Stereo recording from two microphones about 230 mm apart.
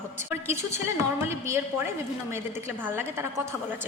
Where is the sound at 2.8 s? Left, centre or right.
Centre.